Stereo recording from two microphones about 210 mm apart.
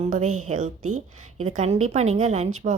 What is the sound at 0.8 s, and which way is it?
Speech, 90° right.